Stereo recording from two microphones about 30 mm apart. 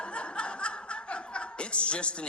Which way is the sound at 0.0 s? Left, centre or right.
Left.